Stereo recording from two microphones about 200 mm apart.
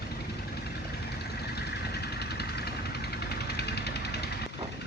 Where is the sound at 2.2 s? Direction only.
55° left (ahead or behind).